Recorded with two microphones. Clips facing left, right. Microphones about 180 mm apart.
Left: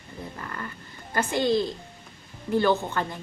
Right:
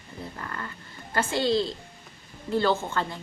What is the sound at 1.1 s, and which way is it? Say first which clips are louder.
A woman's voice: left 1 dB; 15° left (ahead or behind).